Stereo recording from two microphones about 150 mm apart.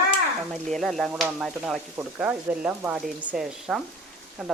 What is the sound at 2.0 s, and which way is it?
Speech, 10° right (ahead or behind).